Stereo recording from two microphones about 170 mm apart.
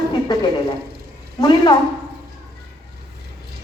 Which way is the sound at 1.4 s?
25° left (ahead or behind).